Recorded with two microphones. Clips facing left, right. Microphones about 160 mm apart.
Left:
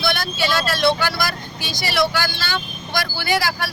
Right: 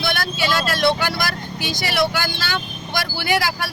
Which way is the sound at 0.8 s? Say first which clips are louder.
Left 1 dB; 15° right (ahead or behind).